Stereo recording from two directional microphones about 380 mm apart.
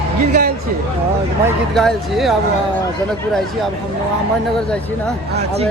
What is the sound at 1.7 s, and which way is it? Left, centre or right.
Speech, centre.